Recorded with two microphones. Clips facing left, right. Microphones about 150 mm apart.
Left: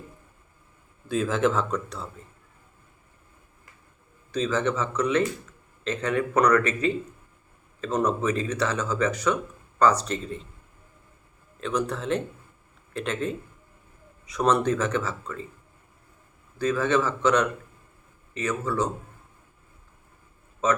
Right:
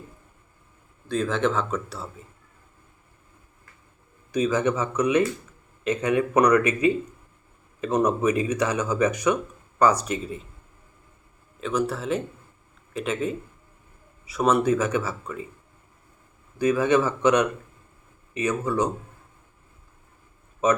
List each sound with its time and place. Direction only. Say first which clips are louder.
1.0 s speech: even; 5° left (ahead or behind)
4.3 s speech: right 3 dB; 15° right (ahead or behind)
11.6 s speech: right 2 dB; 5° right (ahead or behind)
16.6 s speech: right 3 dB; 15° right (ahead or behind)
20.6 s speech: right 3 dB; 15° right (ahead or behind)